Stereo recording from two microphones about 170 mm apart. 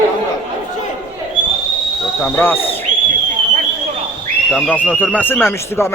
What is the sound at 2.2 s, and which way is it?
Speech, 10° left (ahead or behind).